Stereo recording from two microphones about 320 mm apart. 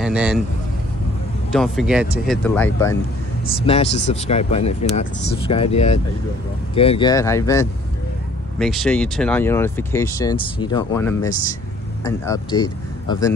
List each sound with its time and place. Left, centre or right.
0.0 s speech: centre
1.5 s speech: centre
3.6 s speech: centre